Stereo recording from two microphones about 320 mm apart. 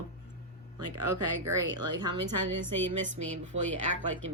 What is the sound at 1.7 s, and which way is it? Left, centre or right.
Speech, right.